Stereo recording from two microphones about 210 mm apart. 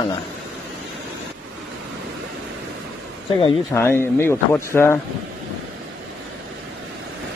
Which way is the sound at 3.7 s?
10° left (ahead or behind).